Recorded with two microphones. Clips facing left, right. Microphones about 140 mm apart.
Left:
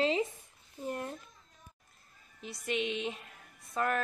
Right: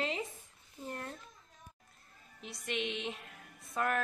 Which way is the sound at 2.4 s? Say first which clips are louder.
Left 4 dB; centre (ahead or behind).